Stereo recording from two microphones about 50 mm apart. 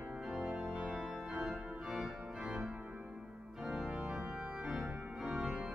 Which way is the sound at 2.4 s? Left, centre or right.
Right.